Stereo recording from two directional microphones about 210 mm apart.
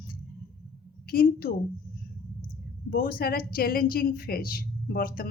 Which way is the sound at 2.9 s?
45° left (ahead or behind).